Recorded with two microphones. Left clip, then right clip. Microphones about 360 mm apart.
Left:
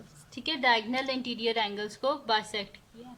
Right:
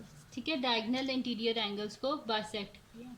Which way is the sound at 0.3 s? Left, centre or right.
Centre.